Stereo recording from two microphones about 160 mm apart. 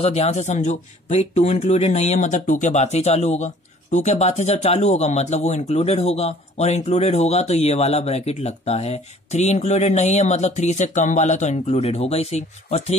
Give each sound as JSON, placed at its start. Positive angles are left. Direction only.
{"t": 0.0, "sound": "speech", "side_deg": 40}